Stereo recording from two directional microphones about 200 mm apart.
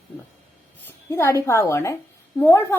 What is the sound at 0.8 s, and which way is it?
A woman's voice, 10° left (ahead or behind).